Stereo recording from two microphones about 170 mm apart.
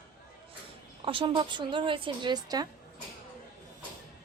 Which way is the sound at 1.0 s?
30° right (ahead or behind).